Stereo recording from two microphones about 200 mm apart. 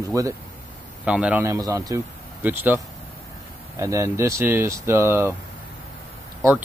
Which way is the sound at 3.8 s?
15° right (ahead or behind).